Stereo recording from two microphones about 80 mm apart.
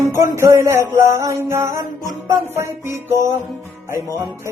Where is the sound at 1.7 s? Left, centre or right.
Right.